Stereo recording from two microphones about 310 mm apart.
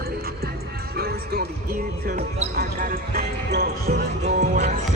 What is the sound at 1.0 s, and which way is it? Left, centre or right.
Basketball bounce, right.